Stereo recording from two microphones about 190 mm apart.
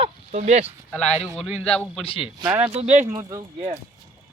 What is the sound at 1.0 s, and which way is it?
Speech, 35° left (ahead or behind).